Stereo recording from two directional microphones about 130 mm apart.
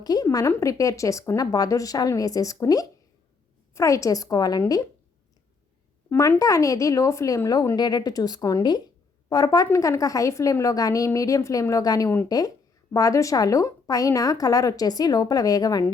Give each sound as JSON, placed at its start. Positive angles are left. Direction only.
{"t": 0.0, "sound": "a woman's voice", "side_deg": 30}
{"t": 6.1, "sound": "a woman's voice", "side_deg": 20}